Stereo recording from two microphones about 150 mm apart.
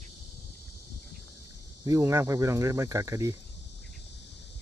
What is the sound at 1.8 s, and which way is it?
Speech, 20° right (ahead or behind).